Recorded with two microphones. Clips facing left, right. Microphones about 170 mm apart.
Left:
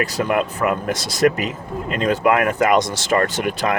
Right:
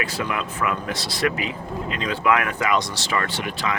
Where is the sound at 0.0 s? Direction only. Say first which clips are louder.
Left 7 dB; 40° left (ahead or behind).